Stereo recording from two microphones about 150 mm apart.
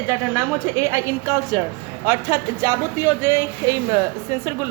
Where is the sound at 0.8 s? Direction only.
20° right (ahead or behind).